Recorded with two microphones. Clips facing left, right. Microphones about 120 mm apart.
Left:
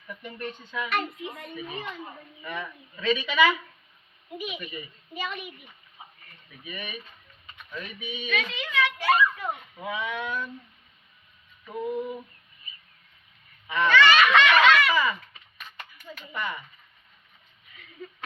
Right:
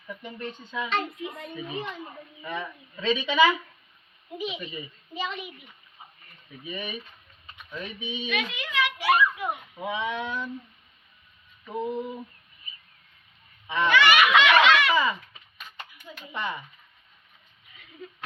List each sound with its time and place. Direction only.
0.1 s speech: 20° right (ahead or behind)
6.7 s speech: 25° right (ahead or behind)
8.7 s a sound: 10° right (ahead or behind); by 10.5 s 25° right (ahead or behind)
11.7 s speech: 25° right (ahead or behind)
13.8 s a sound: 10° right (ahead or behind)
15.9 s speech: 10° right (ahead or behind)